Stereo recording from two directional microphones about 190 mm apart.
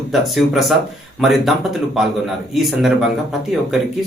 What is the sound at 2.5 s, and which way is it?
Speech, centre (ahead or behind).